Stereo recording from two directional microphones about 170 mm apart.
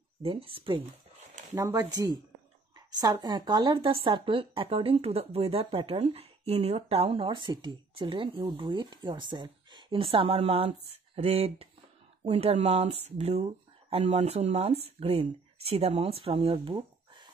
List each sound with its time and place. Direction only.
0.2 s speech: 35° right (ahead or behind)
1.5 s speech: 15° right (ahead or behind)